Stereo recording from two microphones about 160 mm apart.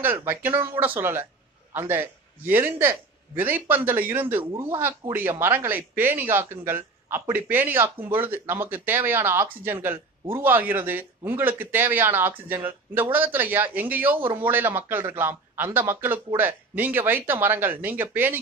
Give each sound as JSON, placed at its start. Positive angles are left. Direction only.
{"t": 0.0, "sound": "speech", "side_deg": -15}